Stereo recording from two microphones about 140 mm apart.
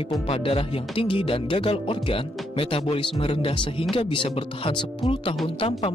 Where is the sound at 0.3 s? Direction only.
40° left (ahead or behind).